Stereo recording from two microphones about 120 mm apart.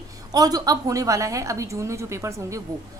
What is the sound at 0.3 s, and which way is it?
A woman's voice, 35° right (ahead or behind).